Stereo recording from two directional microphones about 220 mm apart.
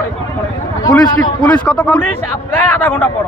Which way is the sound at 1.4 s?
5° left (ahead or behind).